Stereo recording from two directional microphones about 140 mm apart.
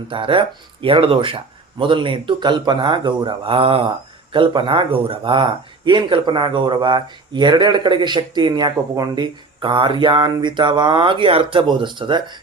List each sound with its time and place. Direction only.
0.1 s speech: 40° right (ahead or behind)